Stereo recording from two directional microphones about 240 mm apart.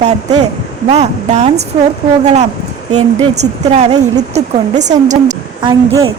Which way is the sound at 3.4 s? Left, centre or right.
Right.